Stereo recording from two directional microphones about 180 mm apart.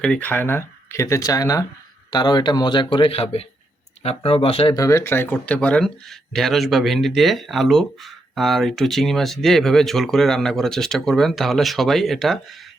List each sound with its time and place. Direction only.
0.0 s a man's voice: 5° left (ahead or behind); by 4.7 s 30° left (ahead or behind)
4.7 s speech: 20° left (ahead or behind); by 12.4 s centre (ahead or behind)